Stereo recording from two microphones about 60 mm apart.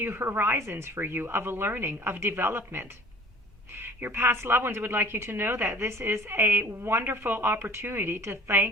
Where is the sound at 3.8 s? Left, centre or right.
Right.